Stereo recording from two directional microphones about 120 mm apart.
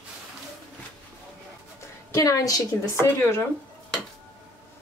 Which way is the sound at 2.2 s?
30° left (ahead or behind).